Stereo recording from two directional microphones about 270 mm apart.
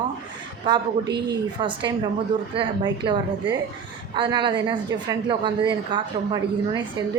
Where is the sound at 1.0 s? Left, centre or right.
Right.